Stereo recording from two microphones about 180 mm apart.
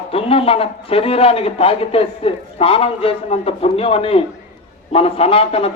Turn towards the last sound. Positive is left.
turn(degrees=30)  # may be behind; listen again after turning